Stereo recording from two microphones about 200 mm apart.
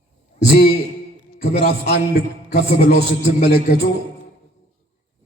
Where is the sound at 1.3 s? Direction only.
40° left (ahead or behind).